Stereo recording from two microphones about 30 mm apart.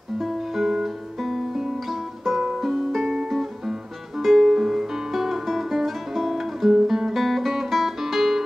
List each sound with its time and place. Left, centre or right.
0.2 s guitar: centre
1.9 s music: centre
3.1 s music: centre
4.2 s music: centre
4.5 s music: centre
6.3 s guitar: centre
6.7 s guitar: centre
7.2 s music: centre